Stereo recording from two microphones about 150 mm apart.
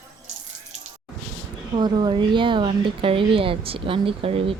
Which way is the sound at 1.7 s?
30° right (ahead or behind).